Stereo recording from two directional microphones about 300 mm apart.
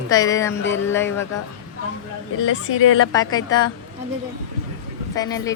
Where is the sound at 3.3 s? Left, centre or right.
Centre.